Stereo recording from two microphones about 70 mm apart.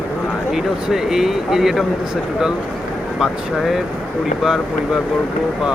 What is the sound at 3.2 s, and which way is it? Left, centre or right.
Speech, centre.